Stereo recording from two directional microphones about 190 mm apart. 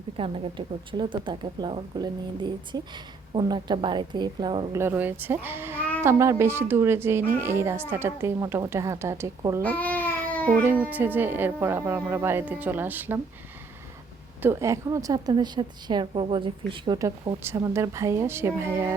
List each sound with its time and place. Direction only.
0.2 s speech: 25° right (ahead or behind)
4.8 s a woman's voice: 10° right (ahead or behind)
9.6 s babbling: 10° left (ahead or behind)
10.6 s a woman's voice: 10° right (ahead or behind)
14.4 s a woman's voice: 15° right (ahead or behind)